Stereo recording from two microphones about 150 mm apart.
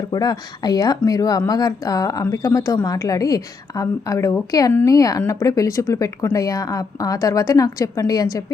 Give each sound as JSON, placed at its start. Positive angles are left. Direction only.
{"t": 0.1, "sound": "speech", "side_deg": 25}